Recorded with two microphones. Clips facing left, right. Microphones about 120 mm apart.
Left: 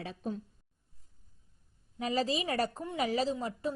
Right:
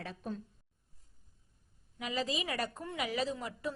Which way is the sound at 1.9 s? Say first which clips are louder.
Left 5 dB; 35° left (ahead or behind).